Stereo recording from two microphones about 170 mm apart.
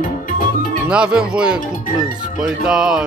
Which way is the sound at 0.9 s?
5° right (ahead or behind).